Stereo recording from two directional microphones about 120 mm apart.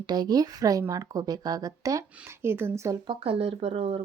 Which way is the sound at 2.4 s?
20° right (ahead or behind).